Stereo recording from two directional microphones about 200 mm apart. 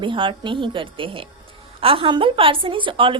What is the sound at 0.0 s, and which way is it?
A woman's voice, 25° right (ahead or behind).